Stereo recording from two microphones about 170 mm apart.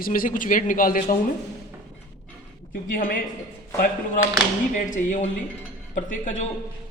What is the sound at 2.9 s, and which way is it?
Speech, 55° left (ahead or behind).